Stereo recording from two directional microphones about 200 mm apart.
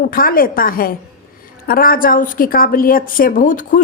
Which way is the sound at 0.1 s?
45° left (ahead or behind).